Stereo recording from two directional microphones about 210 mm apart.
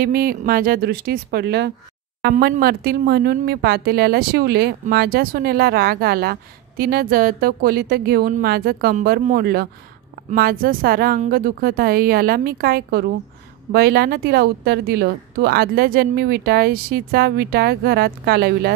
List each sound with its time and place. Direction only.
0.0 s a woman's voice: 45° right (ahead or behind)